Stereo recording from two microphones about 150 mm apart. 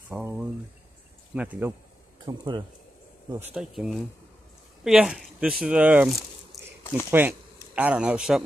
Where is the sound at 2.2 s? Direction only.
25° right (ahead or behind).